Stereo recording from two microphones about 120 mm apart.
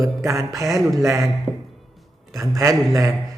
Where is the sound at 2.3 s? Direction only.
25° right (ahead or behind).